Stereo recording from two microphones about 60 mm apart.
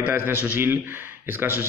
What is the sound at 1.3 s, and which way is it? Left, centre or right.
Speech, right.